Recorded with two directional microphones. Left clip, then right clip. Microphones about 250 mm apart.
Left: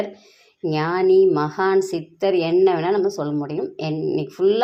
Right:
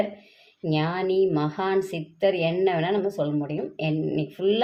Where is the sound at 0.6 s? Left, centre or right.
Left.